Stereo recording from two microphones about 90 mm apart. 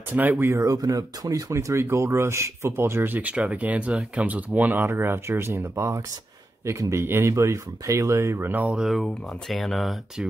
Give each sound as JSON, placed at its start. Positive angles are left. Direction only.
{"t": 0.1, "sound": "speech", "side_deg": -25}
{"t": 8.8, "sound": "speech", "side_deg": 0}